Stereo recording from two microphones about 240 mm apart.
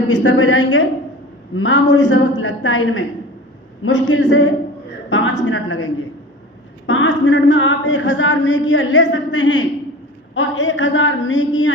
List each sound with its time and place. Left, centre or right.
0.1 s speech: left